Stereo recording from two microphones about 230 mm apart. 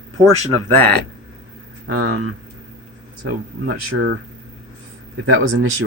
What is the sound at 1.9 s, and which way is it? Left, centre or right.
Speech, right.